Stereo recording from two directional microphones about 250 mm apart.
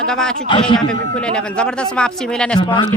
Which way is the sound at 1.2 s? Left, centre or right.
Centre.